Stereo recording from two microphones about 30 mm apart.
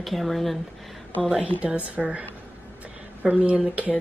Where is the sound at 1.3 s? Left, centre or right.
Right.